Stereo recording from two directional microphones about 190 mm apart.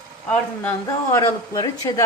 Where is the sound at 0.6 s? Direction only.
15° left (ahead or behind).